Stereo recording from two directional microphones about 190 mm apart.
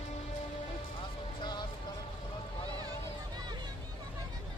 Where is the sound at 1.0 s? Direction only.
25° left (ahead or behind).